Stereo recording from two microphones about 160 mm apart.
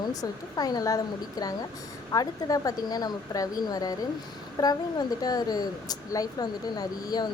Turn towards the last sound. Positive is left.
turn(degrees=25)  # may be behind; listen again after turning